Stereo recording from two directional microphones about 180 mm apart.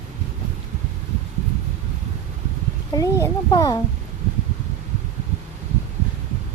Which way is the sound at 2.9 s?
20° left (ahead or behind).